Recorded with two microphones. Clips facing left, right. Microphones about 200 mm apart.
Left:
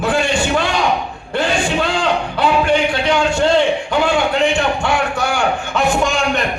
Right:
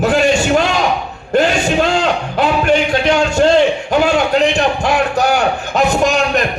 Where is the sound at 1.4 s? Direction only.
40° right (ahead or behind).